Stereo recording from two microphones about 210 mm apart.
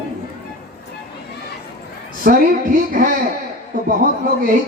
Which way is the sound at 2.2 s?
40° right (ahead or behind).